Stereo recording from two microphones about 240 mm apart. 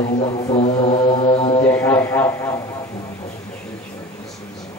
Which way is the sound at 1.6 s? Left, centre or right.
Centre.